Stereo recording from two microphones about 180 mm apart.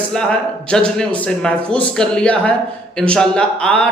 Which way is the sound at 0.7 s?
5° left (ahead or behind).